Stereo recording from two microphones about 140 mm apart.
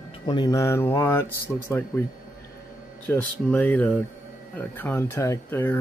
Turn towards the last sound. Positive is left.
turn(degrees=15)  # may be behind; listen again after turning